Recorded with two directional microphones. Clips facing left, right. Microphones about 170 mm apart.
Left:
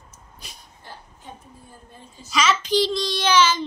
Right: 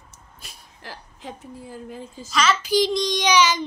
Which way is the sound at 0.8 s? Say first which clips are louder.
Right 5 dB; 90° right.